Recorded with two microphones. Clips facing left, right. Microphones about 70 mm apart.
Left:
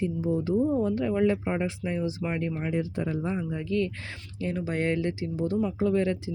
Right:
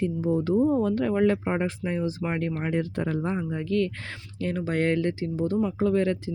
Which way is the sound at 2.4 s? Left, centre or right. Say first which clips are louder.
Right 2 dB; right.